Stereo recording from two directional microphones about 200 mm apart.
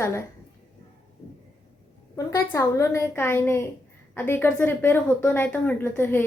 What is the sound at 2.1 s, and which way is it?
A woman's voice, 15° left (ahead or behind).